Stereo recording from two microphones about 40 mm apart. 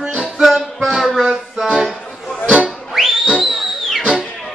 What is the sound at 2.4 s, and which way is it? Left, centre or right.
Music, right.